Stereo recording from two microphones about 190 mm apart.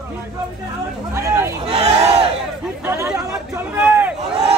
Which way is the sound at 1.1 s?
15° right (ahead or behind).